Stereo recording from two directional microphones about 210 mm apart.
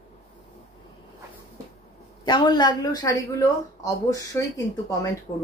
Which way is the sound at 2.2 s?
20° left (ahead or behind).